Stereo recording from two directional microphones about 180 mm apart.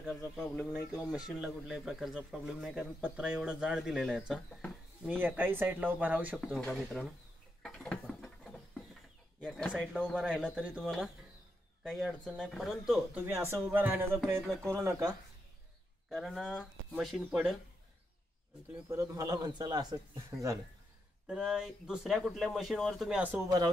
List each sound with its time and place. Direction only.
0.0 s a man's voice: centre (ahead or behind)
7.6 s a sound: 5° left (ahead or behind)
9.4 s a man's voice: centre (ahead or behind); by 15.1 s 20° right (ahead or behind)
16.1 s a man's voice: centre (ahead or behind)
18.9 s a man's voice: 15° right (ahead or behind)
21.3 s a man's voice: 5° right (ahead or behind)